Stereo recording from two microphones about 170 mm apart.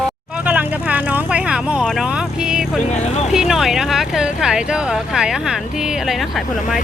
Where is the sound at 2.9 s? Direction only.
40° left (ahead or behind).